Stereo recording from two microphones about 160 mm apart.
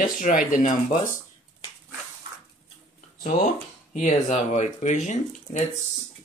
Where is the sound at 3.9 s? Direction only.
50° left (ahead or behind).